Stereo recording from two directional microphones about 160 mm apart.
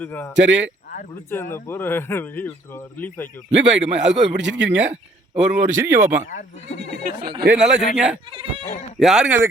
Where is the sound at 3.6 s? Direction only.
90° right.